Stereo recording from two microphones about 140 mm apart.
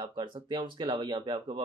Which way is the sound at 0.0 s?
35° right (ahead or behind).